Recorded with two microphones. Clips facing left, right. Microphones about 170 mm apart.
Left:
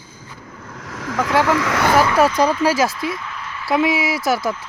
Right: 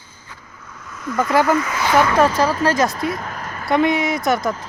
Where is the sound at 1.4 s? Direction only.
85° left.